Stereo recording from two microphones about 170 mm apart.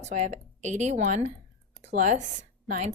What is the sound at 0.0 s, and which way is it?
Speech, 45° right (ahead or behind).